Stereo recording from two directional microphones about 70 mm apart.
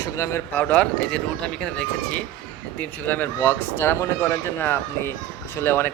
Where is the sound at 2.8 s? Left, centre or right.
Left.